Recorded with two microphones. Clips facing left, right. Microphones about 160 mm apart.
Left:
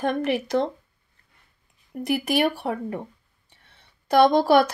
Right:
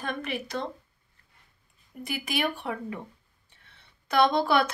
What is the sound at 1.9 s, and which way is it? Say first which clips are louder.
Speech: left 8 dB; 50° left (ahead or behind).